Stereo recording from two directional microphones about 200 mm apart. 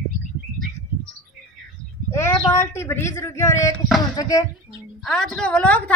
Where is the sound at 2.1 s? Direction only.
15° left (ahead or behind).